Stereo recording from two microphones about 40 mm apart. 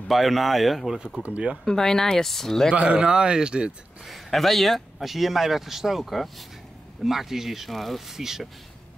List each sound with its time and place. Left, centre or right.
0.1 s speech: centre
1.2 s speech: right
1.6 s speech: centre
2.7 s speech: right
4.0 s speech: centre
8.1 s speech: centre